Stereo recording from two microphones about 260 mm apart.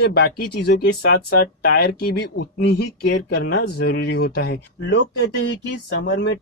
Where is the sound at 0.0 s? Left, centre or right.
Left.